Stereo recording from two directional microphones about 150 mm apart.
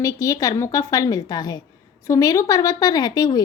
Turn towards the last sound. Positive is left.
turn(degrees=25)  # may be behind; listen again after turning